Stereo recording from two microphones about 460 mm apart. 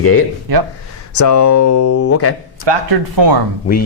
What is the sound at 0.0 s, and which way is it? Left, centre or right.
Speech, left.